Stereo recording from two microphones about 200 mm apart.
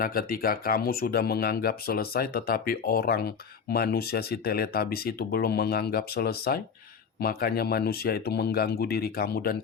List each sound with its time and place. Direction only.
0.0 s speech: 45° left (ahead or behind)